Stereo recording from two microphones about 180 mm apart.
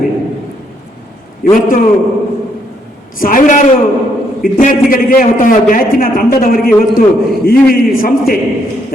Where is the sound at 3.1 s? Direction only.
50° left (ahead or behind).